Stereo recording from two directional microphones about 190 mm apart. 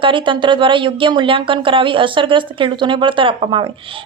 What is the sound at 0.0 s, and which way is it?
Speech, 25° right (ahead or behind).